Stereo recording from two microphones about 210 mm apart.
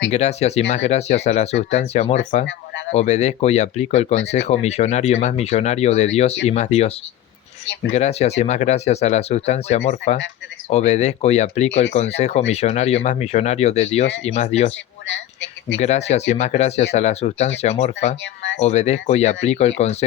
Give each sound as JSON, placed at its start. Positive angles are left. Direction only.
{"t": 0.1, "sound": "speech", "side_deg": 30}
{"t": 7.9, "sound": "speech", "side_deg": 30}
{"t": 15.0, "sound": "a sound", "side_deg": 60}
{"t": 15.8, "sound": "speech", "side_deg": 30}
{"t": 18.2, "sound": "speech", "side_deg": 60}
{"t": 18.6, "sound": "speech", "side_deg": 30}